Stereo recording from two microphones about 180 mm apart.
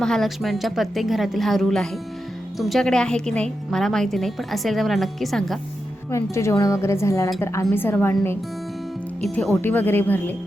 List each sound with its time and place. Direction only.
0.0 s a woman's voice: centre (ahead or behind)
6.1 s speech: 15° left (ahead or behind)
9.6 s speech: 10° left (ahead or behind)